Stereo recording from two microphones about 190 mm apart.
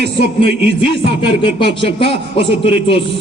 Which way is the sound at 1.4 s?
25° left (ahead or behind).